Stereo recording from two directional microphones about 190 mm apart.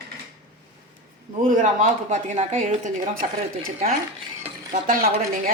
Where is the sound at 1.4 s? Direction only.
45° right (ahead or behind).